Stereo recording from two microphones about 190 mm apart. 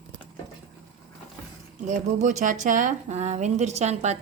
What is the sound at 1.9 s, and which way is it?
Speech, 40° right (ahead or behind).